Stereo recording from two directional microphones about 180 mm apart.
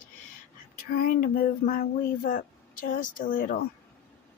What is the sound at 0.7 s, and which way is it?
Speech, 55° left (ahead or behind).